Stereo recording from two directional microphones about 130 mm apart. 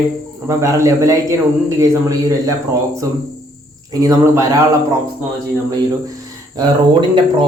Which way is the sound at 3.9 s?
25° right (ahead or behind).